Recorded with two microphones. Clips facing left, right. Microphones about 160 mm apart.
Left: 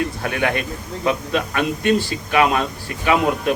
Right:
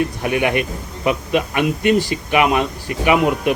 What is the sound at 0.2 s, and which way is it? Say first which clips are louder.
Speech: right 3 dB; 15° right (ahead or behind).